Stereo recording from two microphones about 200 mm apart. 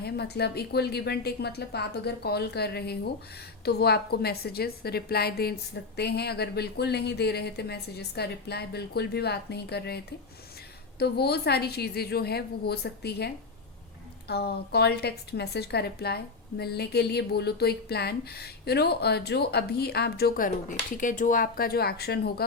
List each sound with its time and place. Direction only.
0.0 s a woman's voice: 55° left (ahead or behind)